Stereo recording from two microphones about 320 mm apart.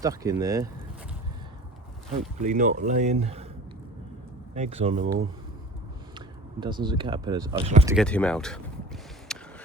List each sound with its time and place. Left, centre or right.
0.0 s speech: centre
2.4 s speech: right
4.5 s speech: centre
7.9 s speech: centre
9.3 s a sound: centre